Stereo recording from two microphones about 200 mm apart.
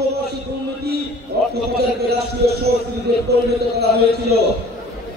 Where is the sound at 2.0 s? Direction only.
55° right (ahead or behind).